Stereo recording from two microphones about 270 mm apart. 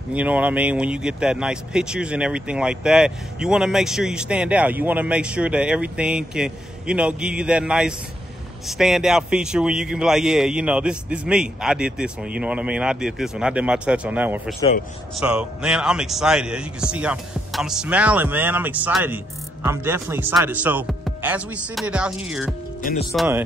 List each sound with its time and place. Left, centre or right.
0.1 s speech: centre
22.8 s speech: left
23.1 s speech: centre